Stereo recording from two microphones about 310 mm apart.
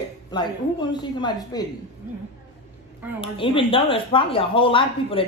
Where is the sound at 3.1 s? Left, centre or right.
Centre.